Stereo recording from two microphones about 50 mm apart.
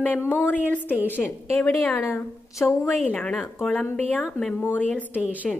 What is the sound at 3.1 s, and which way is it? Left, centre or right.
Speech, left.